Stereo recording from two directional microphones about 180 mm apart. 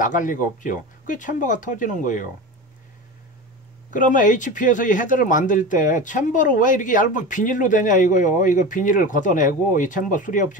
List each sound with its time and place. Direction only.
0.0 s speech: 45° left (ahead or behind)
3.9 s speech: 45° left (ahead or behind)